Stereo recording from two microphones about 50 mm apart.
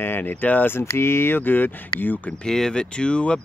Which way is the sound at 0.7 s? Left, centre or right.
Left.